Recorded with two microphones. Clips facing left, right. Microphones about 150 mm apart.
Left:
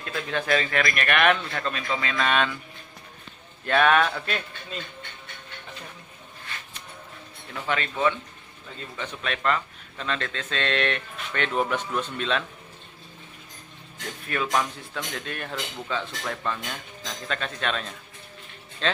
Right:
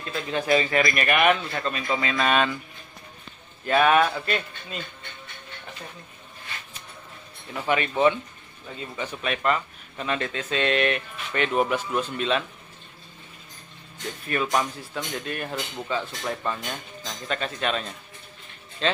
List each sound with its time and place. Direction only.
0.0 s a man's voice: 10° right (ahead or behind)
3.6 s speech: 5° right (ahead or behind)
7.6 s a man's voice: 15° right (ahead or behind)
14.2 s a man's voice: 5° right (ahead or behind)